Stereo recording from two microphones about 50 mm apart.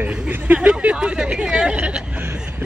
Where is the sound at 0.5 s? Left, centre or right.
Centre.